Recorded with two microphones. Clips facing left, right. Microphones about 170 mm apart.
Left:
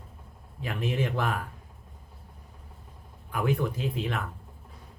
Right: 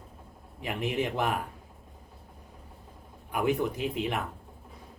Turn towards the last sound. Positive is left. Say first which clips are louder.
# right 1 dB
turn(degrees=-20)  # may be behind; listen again after turning